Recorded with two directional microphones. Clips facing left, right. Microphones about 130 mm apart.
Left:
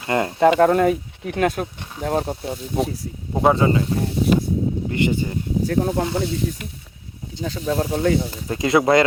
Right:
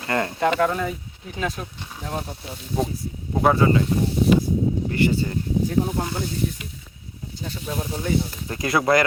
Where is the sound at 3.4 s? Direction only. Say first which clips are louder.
Left 1 dB; 20° left (ahead or behind).